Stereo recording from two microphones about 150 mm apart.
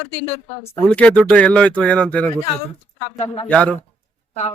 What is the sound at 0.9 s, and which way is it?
Speech, 5° left (ahead or behind).